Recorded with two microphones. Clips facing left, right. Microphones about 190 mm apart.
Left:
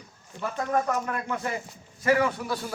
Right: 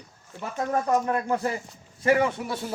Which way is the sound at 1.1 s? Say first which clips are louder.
Right 5 dB; 30° right (ahead or behind).